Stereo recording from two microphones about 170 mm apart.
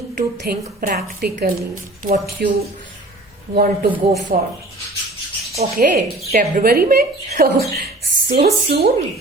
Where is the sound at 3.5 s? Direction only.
60° right (ahead or behind).